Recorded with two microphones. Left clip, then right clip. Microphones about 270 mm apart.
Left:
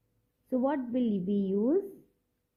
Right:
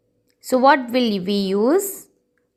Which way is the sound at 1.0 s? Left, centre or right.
Right.